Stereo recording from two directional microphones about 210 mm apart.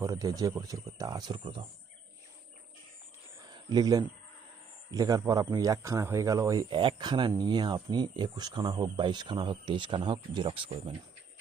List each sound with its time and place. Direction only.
0.0 s speech: 15° right (ahead or behind)
3.5 s speech: 20° right (ahead or behind)